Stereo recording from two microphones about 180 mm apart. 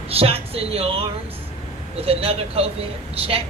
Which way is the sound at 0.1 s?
35° right (ahead or behind).